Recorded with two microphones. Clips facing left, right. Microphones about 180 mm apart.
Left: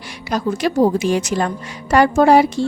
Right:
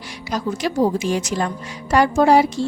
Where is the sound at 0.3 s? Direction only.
60° left (ahead or behind).